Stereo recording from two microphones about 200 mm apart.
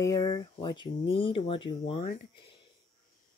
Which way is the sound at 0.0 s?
15° left (ahead or behind).